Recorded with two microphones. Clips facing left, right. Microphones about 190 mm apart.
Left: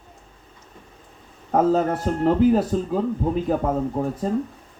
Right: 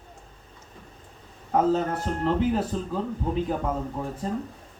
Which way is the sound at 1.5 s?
45° left (ahead or behind).